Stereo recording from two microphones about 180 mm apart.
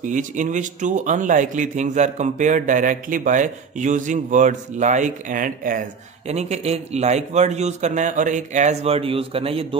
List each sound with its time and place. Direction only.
0.0 s speech: 45° right (ahead or behind)